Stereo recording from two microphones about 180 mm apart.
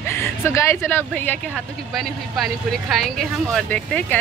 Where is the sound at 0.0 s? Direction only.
15° left (ahead or behind).